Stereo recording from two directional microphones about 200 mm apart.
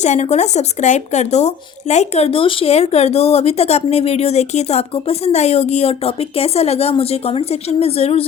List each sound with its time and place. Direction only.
0.0 s speech: 35° left (ahead or behind)